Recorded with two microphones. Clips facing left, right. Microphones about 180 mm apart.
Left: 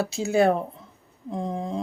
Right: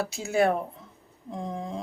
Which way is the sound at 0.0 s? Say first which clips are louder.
Left 3 dB; 25° left (ahead or behind).